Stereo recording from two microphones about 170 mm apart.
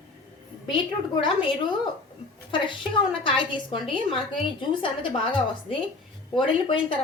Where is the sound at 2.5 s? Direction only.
30° left (ahead or behind).